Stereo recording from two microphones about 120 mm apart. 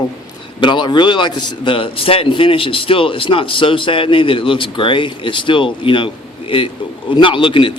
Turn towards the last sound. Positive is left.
turn(degrees=45)  # may be behind; listen again after turning